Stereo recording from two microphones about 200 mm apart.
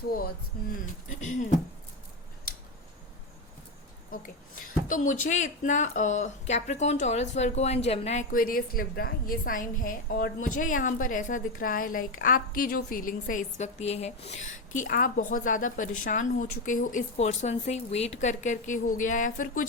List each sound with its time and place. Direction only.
0.1 s speech: 45° left (ahead or behind)
4.1 s speech: 45° left (ahead or behind)